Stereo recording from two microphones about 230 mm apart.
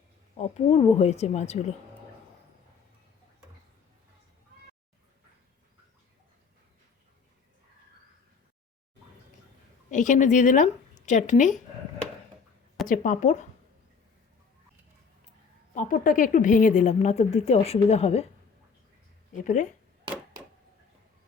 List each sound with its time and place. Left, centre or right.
0.3 s a woman's voice: left
9.9 s speech: left
12.9 s a woman's voice: left
15.7 s a woman's voice: left